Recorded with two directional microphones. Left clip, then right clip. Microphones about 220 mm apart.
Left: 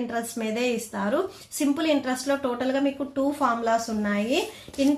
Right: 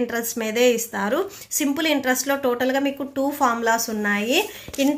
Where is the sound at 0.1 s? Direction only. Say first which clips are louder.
Right 4 dB; 25° right (ahead or behind).